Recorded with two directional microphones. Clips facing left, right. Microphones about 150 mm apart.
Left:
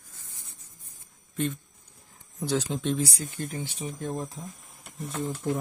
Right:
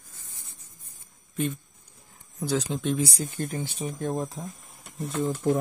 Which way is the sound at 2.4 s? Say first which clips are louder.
Right 1 dB; centre (ahead or behind).